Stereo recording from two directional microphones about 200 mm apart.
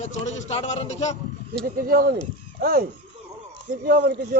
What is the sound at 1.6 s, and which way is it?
Speech, 45° right (ahead or behind).